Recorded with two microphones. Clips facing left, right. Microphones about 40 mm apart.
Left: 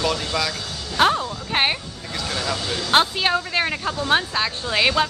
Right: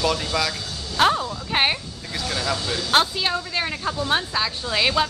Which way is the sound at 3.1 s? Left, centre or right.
Left.